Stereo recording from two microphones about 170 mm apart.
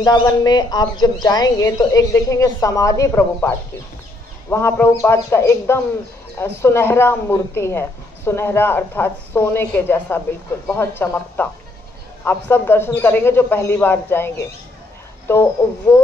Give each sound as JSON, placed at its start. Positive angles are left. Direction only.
{"t": 0.0, "sound": "a woman's voice", "side_deg": 20}
{"t": 15.9, "sound": "a woman's voice", "side_deg": 15}